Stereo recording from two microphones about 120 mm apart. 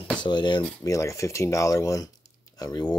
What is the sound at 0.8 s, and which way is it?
Speech, 25° left (ahead or behind).